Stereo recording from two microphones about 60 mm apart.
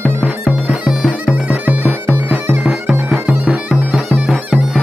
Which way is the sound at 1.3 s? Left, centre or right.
Right.